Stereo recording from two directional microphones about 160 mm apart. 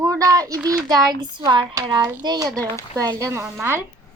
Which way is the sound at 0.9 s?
25° right (ahead or behind).